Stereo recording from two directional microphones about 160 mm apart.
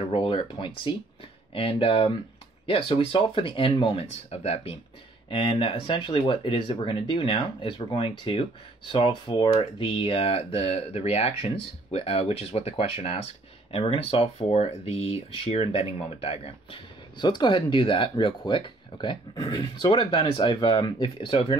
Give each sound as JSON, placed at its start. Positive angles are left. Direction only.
{"t": 0.0, "sound": "speech", "side_deg": 30}